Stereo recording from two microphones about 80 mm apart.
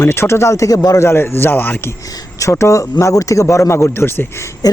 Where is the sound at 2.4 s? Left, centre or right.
Left.